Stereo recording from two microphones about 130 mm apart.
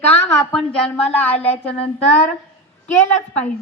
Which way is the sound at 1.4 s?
50° left (ahead or behind).